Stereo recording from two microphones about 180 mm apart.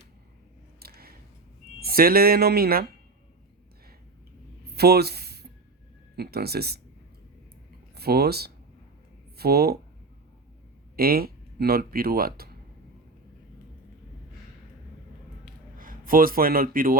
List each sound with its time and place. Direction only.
0.8 s a sound: 55° right (ahead or behind)
1.8 s speech: 55° right (ahead or behind)
4.6 s a sound: 60° right (ahead or behind)
6.1 s speech: 60° right (ahead or behind)
7.9 s speech: 60° right (ahead or behind)
10.9 s speech: 55° right (ahead or behind)
15.8 s speech: 50° right (ahead or behind)